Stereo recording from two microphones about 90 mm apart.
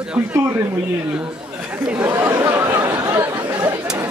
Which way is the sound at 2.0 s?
30° right (ahead or behind).